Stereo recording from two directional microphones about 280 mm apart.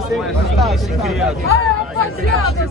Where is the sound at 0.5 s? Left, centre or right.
Centre.